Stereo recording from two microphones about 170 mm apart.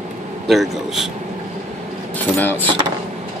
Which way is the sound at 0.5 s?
Centre (ahead or behind).